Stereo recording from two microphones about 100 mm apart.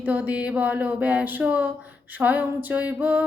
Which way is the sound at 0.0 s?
15° right (ahead or behind).